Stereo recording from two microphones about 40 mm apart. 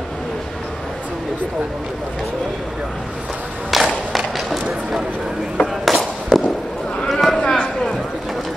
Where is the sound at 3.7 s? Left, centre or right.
Centre.